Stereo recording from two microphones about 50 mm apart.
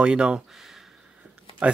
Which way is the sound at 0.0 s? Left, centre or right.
Centre.